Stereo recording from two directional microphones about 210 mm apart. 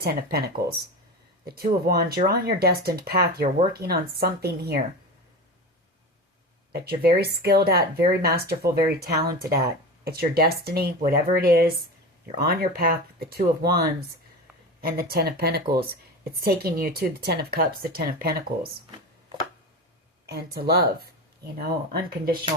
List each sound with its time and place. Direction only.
0.0 s speech: 45° right (ahead or behind)
6.7 s speech: 45° right (ahead or behind)
20.2 s speech: 50° right (ahead or behind)